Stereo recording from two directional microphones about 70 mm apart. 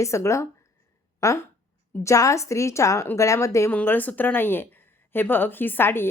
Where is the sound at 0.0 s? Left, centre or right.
Left.